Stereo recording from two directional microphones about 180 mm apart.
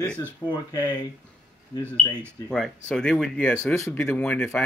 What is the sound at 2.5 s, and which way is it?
Speech, 5° left (ahead or behind).